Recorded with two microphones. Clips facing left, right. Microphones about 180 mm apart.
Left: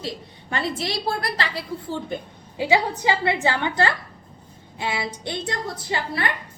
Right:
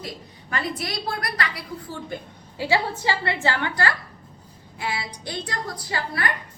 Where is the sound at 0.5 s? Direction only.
25° left (ahead or behind).